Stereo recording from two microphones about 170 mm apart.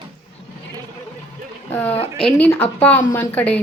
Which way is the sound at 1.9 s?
35° left (ahead or behind).